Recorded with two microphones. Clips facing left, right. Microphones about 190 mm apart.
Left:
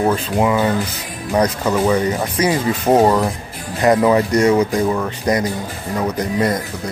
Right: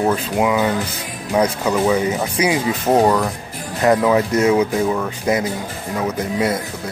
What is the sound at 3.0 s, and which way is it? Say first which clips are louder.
Speech: even; 20° left (ahead or behind).